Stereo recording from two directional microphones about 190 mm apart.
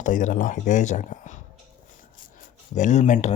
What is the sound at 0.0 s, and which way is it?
Speech, 40° left (ahead or behind).